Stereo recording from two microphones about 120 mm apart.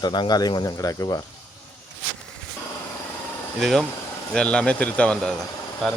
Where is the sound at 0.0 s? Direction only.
35° left (ahead or behind).